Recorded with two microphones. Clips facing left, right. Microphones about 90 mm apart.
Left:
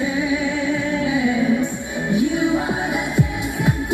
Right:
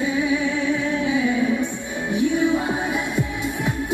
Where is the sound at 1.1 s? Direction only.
15° left (ahead or behind).